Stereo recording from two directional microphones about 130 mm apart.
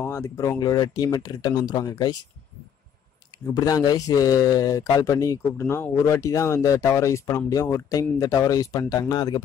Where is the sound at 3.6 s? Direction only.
30° left (ahead or behind).